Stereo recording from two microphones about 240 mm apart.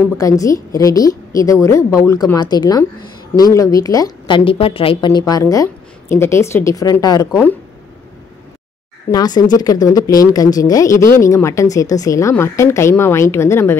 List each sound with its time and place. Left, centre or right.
0.2 s speech: centre
9.1 s speech: centre